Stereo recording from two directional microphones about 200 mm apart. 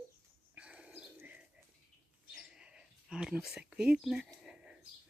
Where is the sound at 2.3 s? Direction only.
5° right (ahead or behind).